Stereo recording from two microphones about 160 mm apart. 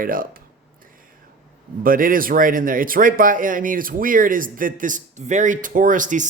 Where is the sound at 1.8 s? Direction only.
60° right (ahead or behind).